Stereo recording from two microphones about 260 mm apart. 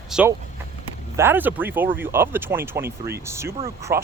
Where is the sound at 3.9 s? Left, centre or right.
Right.